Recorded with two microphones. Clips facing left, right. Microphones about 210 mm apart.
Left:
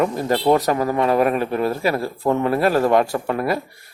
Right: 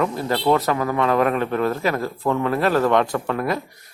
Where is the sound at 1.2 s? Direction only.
10° left (ahead or behind).